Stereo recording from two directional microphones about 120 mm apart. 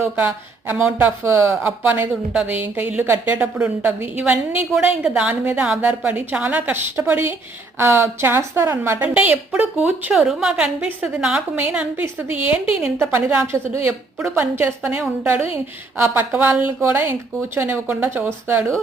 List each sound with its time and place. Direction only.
0.0 s a woman's voice: 15° right (ahead or behind)